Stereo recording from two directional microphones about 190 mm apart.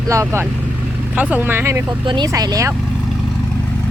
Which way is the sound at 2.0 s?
25° right (ahead or behind).